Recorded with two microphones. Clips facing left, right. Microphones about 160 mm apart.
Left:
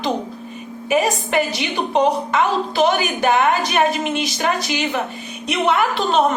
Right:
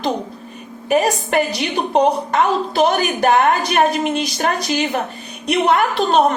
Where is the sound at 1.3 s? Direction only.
45° right (ahead or behind).